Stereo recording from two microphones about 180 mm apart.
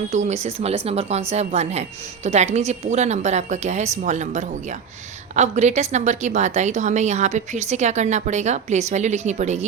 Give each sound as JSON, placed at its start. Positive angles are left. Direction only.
{"t": 0.1, "sound": "a woman's voice", "side_deg": -40}